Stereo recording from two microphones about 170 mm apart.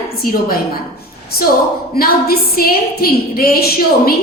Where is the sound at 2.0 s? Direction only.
60° left (ahead or behind).